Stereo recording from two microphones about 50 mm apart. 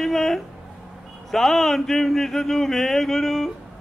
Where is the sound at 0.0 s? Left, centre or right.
Centre.